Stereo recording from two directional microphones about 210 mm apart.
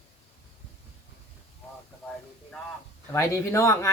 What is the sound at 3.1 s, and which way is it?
Speech, 15° left (ahead or behind).